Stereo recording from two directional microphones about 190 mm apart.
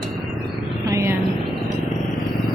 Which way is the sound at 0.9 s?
15° right (ahead or behind).